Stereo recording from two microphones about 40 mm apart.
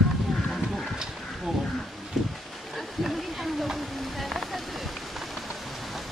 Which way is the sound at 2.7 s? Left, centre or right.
Centre.